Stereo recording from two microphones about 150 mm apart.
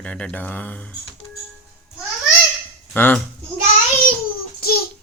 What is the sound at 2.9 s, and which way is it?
Speech, 15° left (ahead or behind).